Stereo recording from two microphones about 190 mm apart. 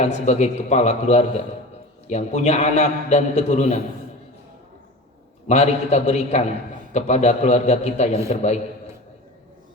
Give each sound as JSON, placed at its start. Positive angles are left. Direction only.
{"t": 0.0, "sound": "a man's voice", "side_deg": 35}
{"t": 5.5, "sound": "a man's voice", "side_deg": 35}